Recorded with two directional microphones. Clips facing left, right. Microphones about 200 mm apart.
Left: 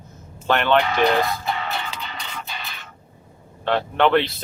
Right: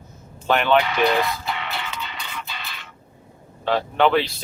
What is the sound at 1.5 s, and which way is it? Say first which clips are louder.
Music: left 3 dB; 40° left (ahead or behind).